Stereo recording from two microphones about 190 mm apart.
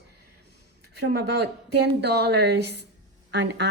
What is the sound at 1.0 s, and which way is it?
A woman's voice, 60° right (ahead or behind).